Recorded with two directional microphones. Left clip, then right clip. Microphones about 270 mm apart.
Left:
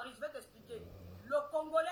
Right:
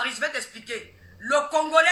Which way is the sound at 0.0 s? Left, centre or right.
Right.